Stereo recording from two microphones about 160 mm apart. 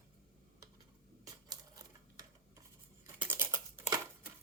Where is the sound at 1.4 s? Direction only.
25° right (ahead or behind).